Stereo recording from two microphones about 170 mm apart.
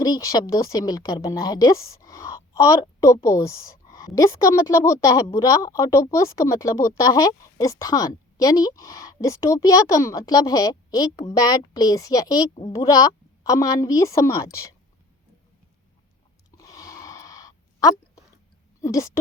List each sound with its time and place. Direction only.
0.0 s a woman's voice: 20° left (ahead or behind)
16.6 s a sound: 20° left (ahead or behind)
18.8 s a woman's voice: 20° left (ahead or behind)